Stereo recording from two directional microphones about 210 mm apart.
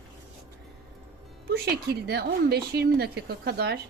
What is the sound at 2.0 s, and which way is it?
A woman's voice, 50° right (ahead or behind).